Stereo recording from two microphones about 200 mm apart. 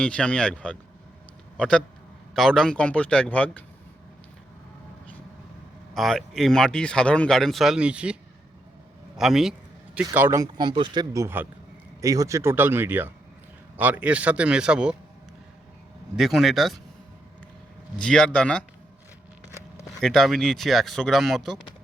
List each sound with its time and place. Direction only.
0.0 s a man's voice: 5° left (ahead or behind)
5.9 s speech: centre (ahead or behind)
9.1 s a sound: centre (ahead or behind)
10.1 s speech: 15° right (ahead or behind)
16.1 s speech: centre (ahead or behind)
17.9 s speech: 5° left (ahead or behind)
20.0 s speech: centre (ahead or behind)